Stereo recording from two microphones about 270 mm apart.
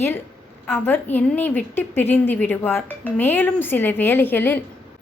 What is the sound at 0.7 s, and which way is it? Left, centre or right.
A woman's voice, centre.